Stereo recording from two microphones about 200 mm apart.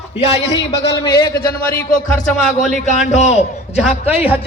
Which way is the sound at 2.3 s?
Centre (ahead or behind).